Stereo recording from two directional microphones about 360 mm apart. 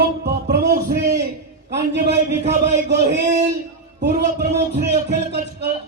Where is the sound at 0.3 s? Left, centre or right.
Right.